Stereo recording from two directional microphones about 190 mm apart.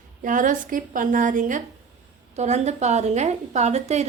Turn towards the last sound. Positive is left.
turn(degrees=-35)  # may be behind; listen again after turning